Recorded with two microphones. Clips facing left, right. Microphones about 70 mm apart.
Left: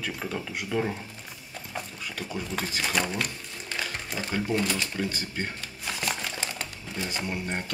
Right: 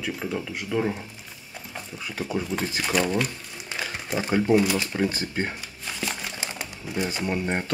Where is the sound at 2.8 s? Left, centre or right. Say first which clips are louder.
Right 5 dB; centre.